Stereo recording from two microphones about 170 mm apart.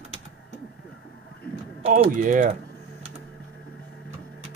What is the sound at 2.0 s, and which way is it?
Speech, 50° right (ahead or behind).